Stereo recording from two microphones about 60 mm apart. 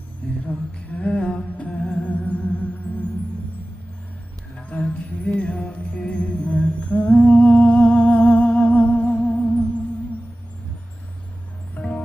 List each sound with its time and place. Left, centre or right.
0.2 s music: left
4.5 s music: left
11.8 s music: centre